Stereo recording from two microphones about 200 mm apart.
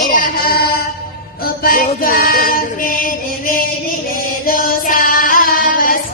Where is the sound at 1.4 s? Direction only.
45° left (ahead or behind).